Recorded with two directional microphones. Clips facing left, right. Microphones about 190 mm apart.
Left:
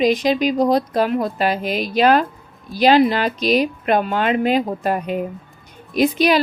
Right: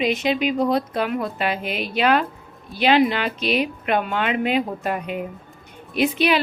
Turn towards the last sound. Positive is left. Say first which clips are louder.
# left 3 dB
turn(degrees=40)  # may be behind; listen again after turning